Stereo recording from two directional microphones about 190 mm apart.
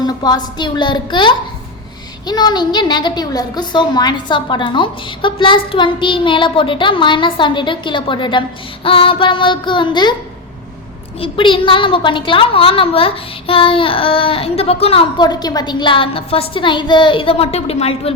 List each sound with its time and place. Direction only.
0.0 s a woman's voice: 20° left (ahead or behind)
11.2 s a woman's voice: 25° left (ahead or behind)